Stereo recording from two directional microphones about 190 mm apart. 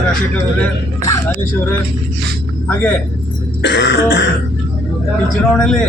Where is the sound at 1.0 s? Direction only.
15° left (ahead or behind).